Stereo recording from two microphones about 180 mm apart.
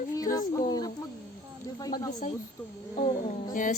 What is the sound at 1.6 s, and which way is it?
Speech, 20° left (ahead or behind).